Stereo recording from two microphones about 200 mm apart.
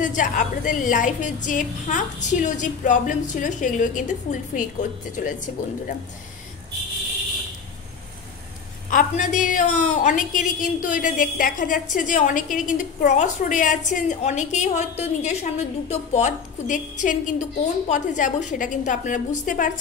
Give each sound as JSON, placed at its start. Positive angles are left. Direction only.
{"t": 0.0, "sound": "a woman's voice", "side_deg": 40}
{"t": 8.9, "sound": "a woman's voice", "side_deg": 40}